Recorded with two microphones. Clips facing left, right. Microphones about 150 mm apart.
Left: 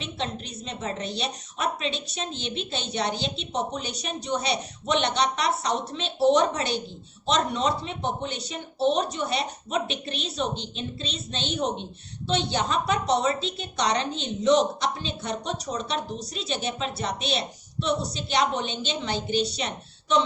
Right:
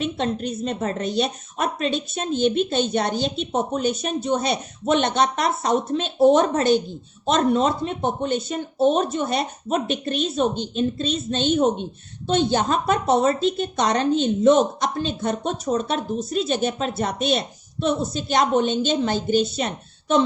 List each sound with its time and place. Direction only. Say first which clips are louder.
0.0 s a woman's voice: right 8 dB; 50° right (ahead or behind)